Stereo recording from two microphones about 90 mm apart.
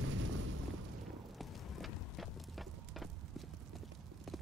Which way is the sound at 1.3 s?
Centre (ahead or behind).